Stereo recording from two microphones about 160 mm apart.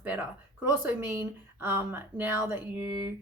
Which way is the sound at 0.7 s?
15° right (ahead or behind).